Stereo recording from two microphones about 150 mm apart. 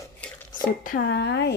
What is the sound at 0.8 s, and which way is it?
Speech, 80° left.